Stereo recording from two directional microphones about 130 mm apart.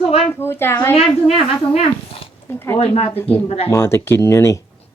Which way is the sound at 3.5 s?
50° left (ahead or behind).